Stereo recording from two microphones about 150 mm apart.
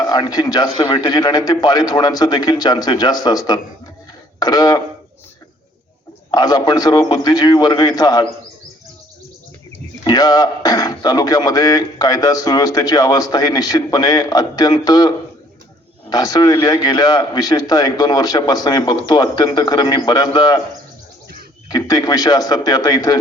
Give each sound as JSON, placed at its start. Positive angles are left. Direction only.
{"t": 0.0, "sound": "speech", "side_deg": 25}
{"t": 4.4, "sound": "a sound", "side_deg": 25}
{"t": 6.3, "sound": "speech", "side_deg": 25}
{"t": 10.0, "sound": "speech", "side_deg": 25}
{"t": 21.7, "sound": "speech", "side_deg": 25}